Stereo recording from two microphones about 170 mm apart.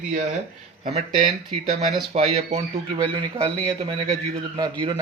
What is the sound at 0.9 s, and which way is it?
A man's voice, 40° right (ahead or behind).